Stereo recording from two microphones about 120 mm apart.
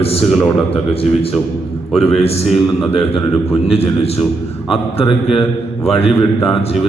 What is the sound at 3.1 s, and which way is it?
Speech, 55° left (ahead or behind).